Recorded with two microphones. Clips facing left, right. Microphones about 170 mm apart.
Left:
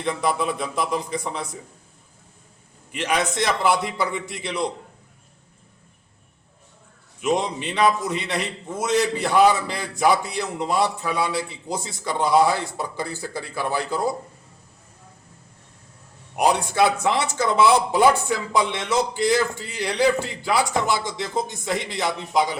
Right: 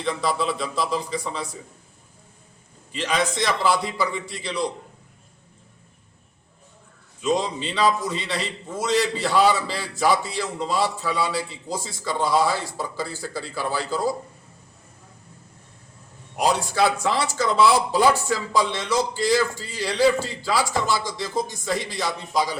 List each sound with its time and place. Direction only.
0.0 s a man's voice: 20° left (ahead or behind)
2.9 s a man's voice: 15° left (ahead or behind)
7.2 s a man's voice: 20° left (ahead or behind)
16.3 s a man's voice: 20° left (ahead or behind)